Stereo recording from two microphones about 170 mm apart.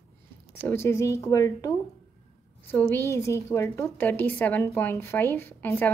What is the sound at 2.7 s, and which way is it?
A woman's voice, 10° left (ahead or behind).